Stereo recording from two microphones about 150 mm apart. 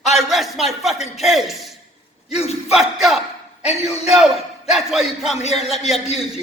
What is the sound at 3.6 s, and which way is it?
Speech, 45° left (ahead or behind).